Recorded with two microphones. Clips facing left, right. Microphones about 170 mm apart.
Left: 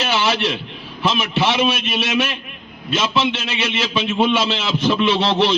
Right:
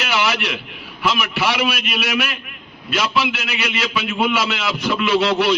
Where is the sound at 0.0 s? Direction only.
25° left (ahead or behind).